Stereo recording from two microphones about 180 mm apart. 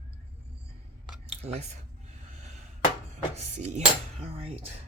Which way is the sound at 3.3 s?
40° right (ahead or behind).